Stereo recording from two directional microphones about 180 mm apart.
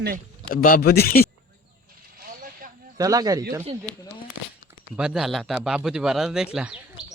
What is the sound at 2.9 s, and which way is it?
Speech, 20° right (ahead or behind).